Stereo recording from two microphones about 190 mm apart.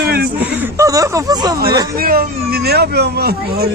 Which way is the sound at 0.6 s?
15° right (ahead or behind).